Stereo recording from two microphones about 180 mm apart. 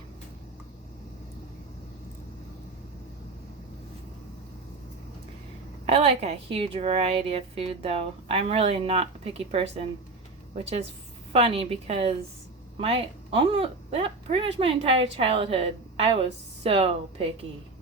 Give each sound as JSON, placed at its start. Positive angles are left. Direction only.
{"t": 5.8, "sound": "a woman's voice", "side_deg": -35}